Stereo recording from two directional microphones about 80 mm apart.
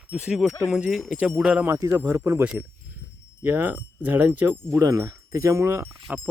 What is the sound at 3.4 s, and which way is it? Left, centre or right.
Speech, right.